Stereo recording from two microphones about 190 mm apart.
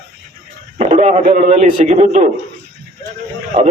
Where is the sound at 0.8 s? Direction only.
35° right (ahead or behind).